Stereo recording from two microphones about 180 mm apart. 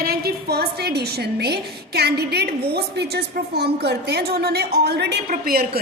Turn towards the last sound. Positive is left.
turn(degrees=-55)  # may be behind; listen again after turning